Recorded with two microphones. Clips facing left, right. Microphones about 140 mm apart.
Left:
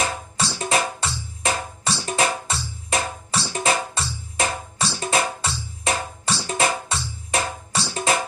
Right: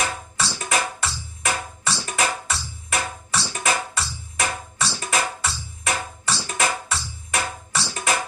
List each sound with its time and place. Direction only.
0.0 s music: 25° left (ahead or behind)